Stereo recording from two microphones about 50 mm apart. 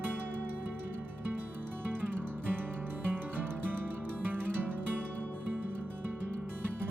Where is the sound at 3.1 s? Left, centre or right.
Right.